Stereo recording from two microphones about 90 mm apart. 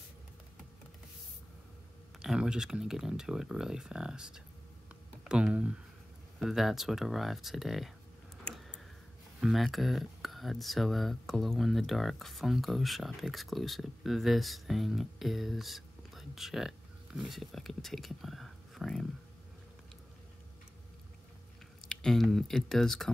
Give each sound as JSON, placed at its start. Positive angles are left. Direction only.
{"t": 2.1, "sound": "speech", "side_deg": -5}
{"t": 8.5, "sound": "a sound", "side_deg": 10}
{"t": 9.4, "sound": "speech", "side_deg": 0}
{"t": 21.8, "sound": "speech", "side_deg": 5}